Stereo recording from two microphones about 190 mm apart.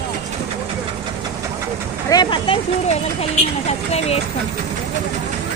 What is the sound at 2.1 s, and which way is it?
Speech, 25° left (ahead or behind).